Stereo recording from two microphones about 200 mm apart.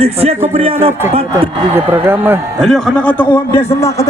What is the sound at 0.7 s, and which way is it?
Speech, 10° right (ahead or behind).